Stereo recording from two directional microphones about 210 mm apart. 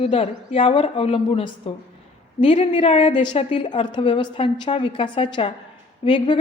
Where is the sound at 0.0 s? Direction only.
30° left (ahead or behind).